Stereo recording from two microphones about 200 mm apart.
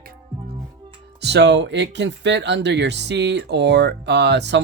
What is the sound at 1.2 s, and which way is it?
Speech, 60° right (ahead or behind).